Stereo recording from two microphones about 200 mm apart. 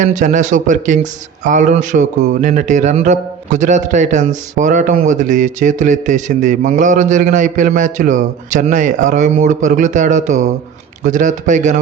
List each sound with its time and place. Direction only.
0.0 s a man's voice: 40° right (ahead or behind)